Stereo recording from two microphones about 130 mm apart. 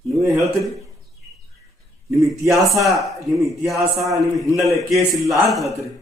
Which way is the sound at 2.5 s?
Centre (ahead or behind).